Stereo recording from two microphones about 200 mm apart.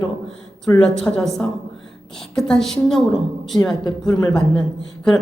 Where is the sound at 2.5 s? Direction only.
Centre (ahead or behind).